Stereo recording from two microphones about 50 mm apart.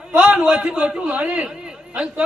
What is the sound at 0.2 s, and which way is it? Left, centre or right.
A man's voice, right.